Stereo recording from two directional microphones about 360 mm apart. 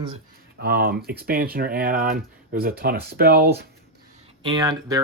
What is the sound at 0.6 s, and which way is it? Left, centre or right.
Speech, right.